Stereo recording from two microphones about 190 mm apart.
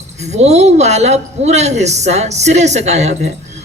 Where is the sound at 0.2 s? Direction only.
35° right (ahead or behind).